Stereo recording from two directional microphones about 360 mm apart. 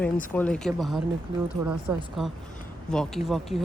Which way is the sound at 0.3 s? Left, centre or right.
Centre.